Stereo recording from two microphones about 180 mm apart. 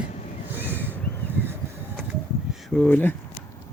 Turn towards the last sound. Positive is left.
turn(degrees=10)  # may be behind; listen again after turning